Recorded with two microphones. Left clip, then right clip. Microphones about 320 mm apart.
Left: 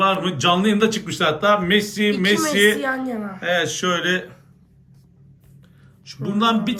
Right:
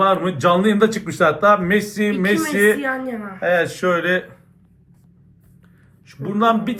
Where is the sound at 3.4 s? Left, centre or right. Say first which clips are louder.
Right 3 dB; centre.